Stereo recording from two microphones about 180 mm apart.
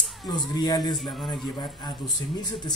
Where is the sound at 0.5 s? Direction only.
20° left (ahead or behind).